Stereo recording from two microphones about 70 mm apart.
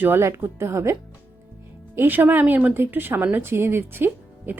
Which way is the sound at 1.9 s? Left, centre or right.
Right.